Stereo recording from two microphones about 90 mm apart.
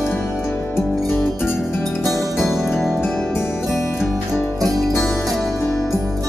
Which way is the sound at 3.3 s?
25° left (ahead or behind).